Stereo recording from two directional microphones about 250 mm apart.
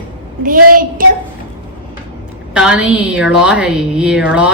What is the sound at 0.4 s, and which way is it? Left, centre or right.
Speech, right.